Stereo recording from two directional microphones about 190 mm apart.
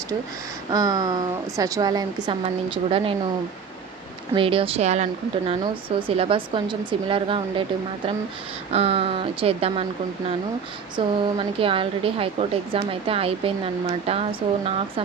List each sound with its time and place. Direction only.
0.7 s a woman's voice: 20° right (ahead or behind)
4.4 s a woman's voice: 30° right (ahead or behind)